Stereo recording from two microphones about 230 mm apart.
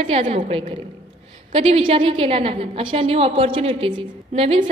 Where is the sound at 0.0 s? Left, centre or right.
Right.